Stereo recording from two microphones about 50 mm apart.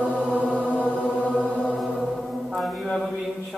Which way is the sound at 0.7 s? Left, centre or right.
Left.